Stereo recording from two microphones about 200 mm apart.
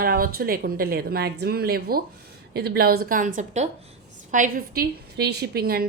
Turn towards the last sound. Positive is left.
turn(degrees=-50)  # may be behind; listen again after turning